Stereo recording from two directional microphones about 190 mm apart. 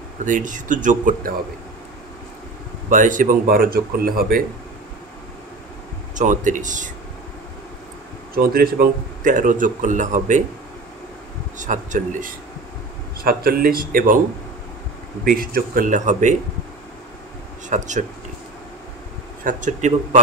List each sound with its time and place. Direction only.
0.2 s a man's voice: 40° right (ahead or behind)
2.9 s a man's voice: 40° right (ahead or behind)
6.1 s speech: 40° right (ahead or behind)
8.4 s a man's voice: 50° right (ahead or behind)
11.5 s a man's voice: 40° right (ahead or behind)
15.2 s a man's voice: 50° right (ahead or behind)
17.6 s speech: 40° right (ahead or behind)
19.4 s speech: 40° right (ahead or behind)